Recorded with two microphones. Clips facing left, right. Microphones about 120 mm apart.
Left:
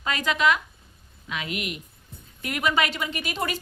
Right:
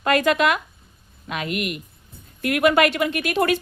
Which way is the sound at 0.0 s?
55° right (ahead or behind).